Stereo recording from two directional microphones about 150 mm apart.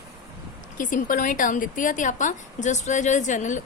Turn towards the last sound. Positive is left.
turn(degrees=55)  # may be behind; listen again after turning